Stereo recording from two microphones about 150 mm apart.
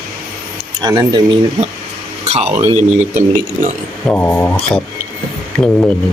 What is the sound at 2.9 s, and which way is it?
Speech, 55° right (ahead or behind).